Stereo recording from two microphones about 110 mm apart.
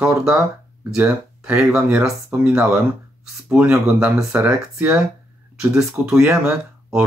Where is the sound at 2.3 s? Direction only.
20° right (ahead or behind).